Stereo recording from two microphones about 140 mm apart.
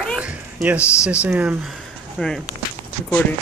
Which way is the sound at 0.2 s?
10° right (ahead or behind).